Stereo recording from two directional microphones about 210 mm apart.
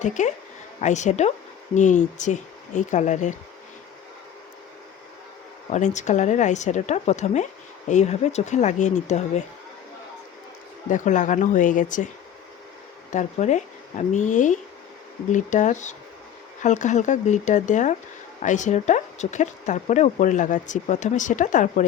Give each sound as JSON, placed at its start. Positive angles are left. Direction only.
{"t": 0.0, "sound": "speech", "side_deg": 35}
{"t": 5.7, "sound": "speech", "side_deg": 35}
{"t": 10.8, "sound": "speech", "side_deg": 35}
{"t": 13.1, "sound": "speech", "side_deg": 35}